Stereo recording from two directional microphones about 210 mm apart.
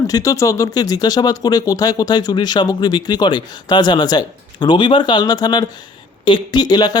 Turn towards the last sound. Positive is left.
turn(degrees=20)  # may be behind; listen again after turning